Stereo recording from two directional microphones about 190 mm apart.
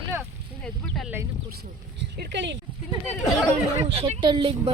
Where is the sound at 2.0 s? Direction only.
70° right (ahead or behind).